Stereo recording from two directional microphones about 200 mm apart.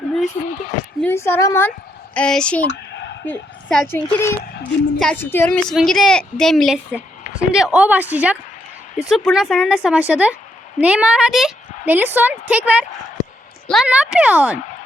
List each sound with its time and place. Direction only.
0.4 s speech: 35° left (ahead or behind)
1.0 s a woman's voice: 10° left (ahead or behind)
2.6 s a sound: 60° left (ahead or behind)
3.2 s a woman's voice: 5° left (ahead or behind)